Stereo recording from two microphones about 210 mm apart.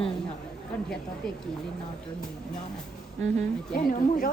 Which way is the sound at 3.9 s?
40° left (ahead or behind).